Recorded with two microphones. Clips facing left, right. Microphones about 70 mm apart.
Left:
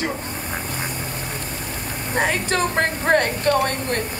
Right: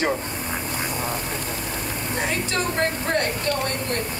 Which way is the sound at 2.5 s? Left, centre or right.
Left.